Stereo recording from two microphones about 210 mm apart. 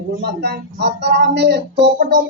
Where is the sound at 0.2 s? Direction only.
55° right (ahead or behind).